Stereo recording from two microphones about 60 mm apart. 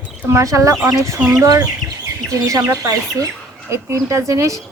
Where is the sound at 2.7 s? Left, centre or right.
Right.